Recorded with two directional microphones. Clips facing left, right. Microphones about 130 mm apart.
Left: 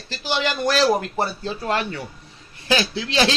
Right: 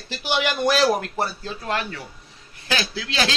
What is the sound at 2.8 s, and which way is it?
Speech, 30° left (ahead or behind).